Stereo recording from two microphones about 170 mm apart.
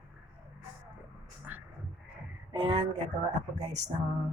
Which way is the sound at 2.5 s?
30° right (ahead or behind).